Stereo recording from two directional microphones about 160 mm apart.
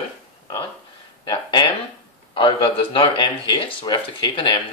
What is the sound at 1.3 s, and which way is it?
Speech, 30° left (ahead or behind).